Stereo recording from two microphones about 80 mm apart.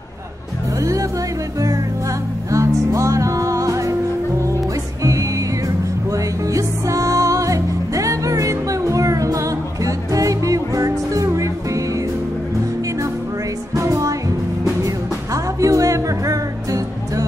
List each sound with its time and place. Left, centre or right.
2.5 s music: right
6.1 s music: right
13.7 s music: right
15.3 s music: right